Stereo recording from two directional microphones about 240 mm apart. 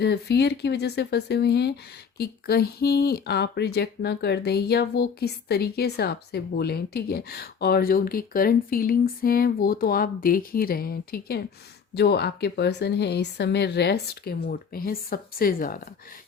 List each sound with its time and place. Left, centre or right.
0.0 s speech: left